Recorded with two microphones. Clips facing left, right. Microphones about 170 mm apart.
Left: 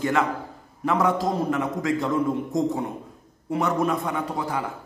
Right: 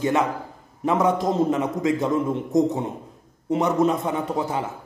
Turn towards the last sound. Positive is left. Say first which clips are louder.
# right 3 dB
turn(degrees=-20)  # may be behind; listen again after turning